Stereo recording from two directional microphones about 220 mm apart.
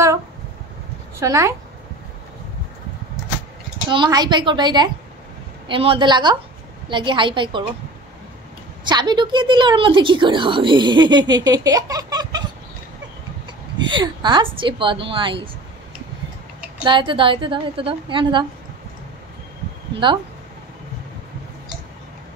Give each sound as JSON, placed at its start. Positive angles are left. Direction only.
{"t": 1.2, "sound": "speech", "side_deg": -15}
{"t": 3.9, "sound": "a woman's voice", "side_deg": -20}
{"t": 8.8, "sound": "a woman's voice", "side_deg": -20}
{"t": 13.9, "sound": "a woman's voice", "side_deg": -20}
{"t": 16.8, "sound": "a woman's voice", "side_deg": -20}